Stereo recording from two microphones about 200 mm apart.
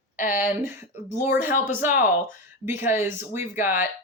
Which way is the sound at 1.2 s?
10° right (ahead or behind).